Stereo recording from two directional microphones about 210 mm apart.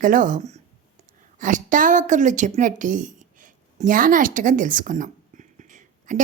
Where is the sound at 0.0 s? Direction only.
40° right (ahead or behind).